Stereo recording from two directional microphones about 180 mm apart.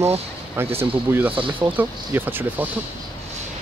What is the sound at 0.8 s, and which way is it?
Speech, 10° right (ahead or behind).